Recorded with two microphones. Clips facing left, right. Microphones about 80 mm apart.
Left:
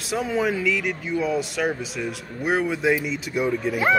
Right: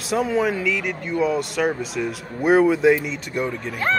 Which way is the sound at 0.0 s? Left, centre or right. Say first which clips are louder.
Right 3 dB; centre.